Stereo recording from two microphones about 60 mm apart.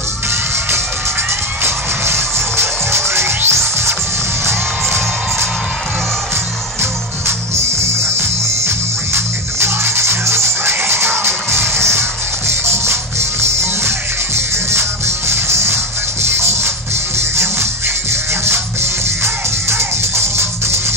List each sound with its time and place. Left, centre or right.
1.6 s music: right
6.8 s music: right